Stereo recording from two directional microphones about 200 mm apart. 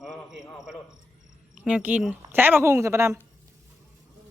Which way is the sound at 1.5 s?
5° right (ahead or behind).